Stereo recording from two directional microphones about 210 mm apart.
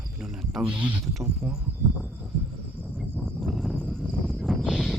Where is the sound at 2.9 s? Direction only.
5° left (ahead or behind).